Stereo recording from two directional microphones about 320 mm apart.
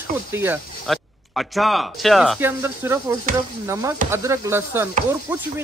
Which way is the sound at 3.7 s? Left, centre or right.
Centre.